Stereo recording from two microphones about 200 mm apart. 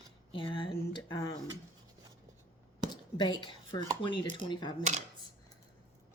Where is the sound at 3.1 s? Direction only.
25° left (ahead or behind).